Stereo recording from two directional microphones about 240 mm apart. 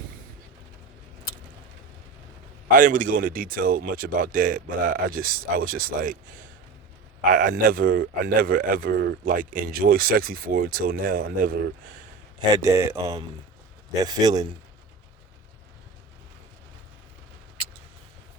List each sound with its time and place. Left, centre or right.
2.7 s speech: right
7.3 s speech: right
12.6 s speech: centre